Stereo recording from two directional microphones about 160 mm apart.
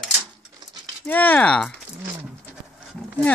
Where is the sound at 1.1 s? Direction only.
10° left (ahead or behind).